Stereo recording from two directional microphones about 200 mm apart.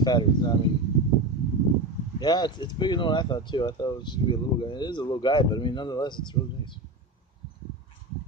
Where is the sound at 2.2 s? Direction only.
20° left (ahead or behind).